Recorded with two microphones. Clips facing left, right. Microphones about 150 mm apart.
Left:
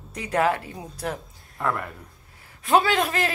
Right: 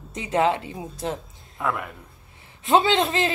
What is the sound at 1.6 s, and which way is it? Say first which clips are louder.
Speech: even; 5° right (ahead or behind).